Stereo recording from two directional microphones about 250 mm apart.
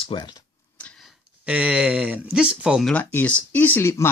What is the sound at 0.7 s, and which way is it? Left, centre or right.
Speech, centre.